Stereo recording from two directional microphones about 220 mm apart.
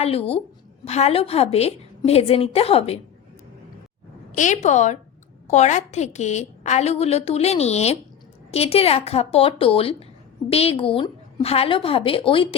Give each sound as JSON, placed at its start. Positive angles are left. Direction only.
{"t": 0.0, "sound": "a woman's voice", "side_deg": 25}
{"t": 4.4, "sound": "a woman's voice", "side_deg": 35}